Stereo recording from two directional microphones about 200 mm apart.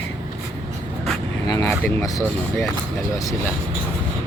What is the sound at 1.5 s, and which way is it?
Speech, 15° left (ahead or behind).